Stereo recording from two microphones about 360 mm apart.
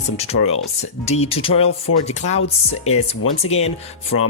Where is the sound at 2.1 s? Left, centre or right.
Centre.